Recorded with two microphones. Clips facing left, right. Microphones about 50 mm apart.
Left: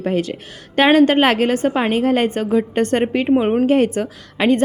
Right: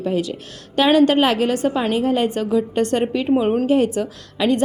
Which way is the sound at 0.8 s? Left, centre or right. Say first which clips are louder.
Left 2 dB; left.